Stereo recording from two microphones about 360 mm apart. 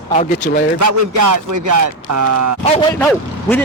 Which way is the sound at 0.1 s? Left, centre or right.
Centre.